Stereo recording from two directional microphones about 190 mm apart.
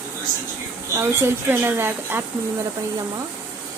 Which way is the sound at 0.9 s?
10° right (ahead or behind).